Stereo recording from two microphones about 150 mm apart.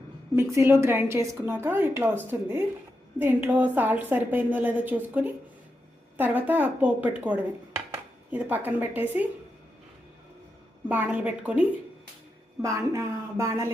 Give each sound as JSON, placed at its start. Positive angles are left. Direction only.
{"t": 0.3, "sound": "a woman's voice", "side_deg": -20}
{"t": 10.8, "sound": "a woman's voice", "side_deg": -10}
{"t": 12.6, "sound": "speech", "side_deg": -20}